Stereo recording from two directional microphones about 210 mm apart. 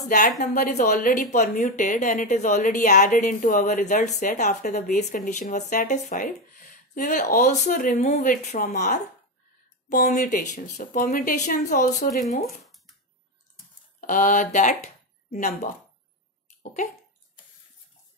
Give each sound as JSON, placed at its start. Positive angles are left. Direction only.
{"t": 0.0, "sound": "speech", "side_deg": 35}
{"t": 14.0, "sound": "speech", "side_deg": 40}